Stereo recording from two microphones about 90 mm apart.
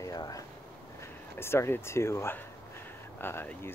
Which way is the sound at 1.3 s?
30° left (ahead or behind).